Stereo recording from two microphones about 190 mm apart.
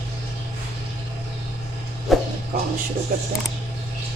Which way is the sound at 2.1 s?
Centre (ahead or behind).